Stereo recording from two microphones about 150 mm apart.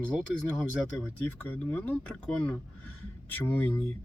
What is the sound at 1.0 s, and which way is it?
Speech, 10° left (ahead or behind).